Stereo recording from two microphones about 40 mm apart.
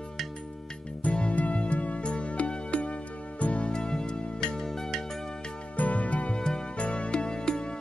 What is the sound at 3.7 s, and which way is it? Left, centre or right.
Music, centre.